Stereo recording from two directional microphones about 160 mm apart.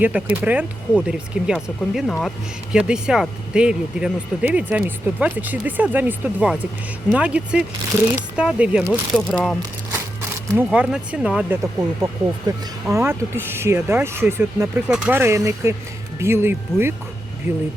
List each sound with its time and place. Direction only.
0.4 s speech: 5° right (ahead or behind)
8.9 s speech: 5° left (ahead or behind)
10.6 s speech: 5° right (ahead or behind)
11.8 s speech: 20° right (ahead or behind)